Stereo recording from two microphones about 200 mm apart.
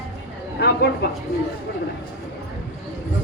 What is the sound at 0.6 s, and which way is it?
Speech, 55° left (ahead or behind).